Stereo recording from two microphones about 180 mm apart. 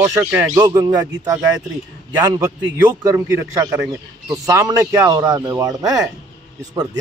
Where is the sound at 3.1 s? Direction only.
15° right (ahead or behind).